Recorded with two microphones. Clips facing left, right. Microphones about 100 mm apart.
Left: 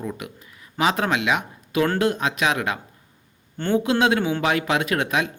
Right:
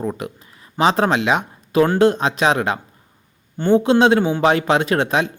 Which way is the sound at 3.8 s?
30° right (ahead or behind).